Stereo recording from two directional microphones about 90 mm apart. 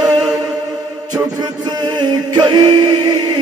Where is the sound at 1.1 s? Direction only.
50° right (ahead or behind).